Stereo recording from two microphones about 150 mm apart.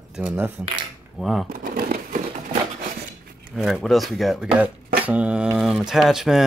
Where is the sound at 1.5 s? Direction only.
70° right (ahead or behind).